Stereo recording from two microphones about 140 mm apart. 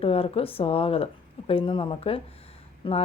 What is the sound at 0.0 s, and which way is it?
A woman's voice, 45° left (ahead or behind).